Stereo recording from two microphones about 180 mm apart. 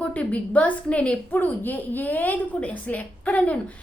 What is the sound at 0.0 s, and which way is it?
A woman's voice, 5° left (ahead or behind).